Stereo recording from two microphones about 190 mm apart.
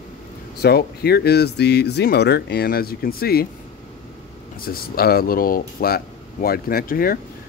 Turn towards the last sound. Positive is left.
turn(degrees=50)  # may be behind; listen again after turning